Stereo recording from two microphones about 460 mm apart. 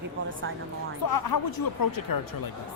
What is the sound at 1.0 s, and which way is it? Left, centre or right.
Speech, left.